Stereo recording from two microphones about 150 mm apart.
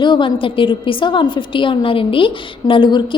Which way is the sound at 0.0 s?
30° left (ahead or behind).